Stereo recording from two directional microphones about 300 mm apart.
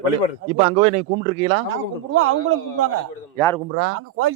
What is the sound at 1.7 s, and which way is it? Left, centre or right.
A man's voice, right.